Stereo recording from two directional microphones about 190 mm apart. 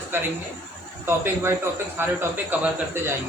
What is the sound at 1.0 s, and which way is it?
A man's voice, 10° right (ahead or behind).